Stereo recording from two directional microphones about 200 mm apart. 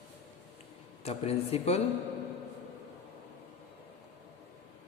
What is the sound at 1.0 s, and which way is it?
Speech, 30° left (ahead or behind).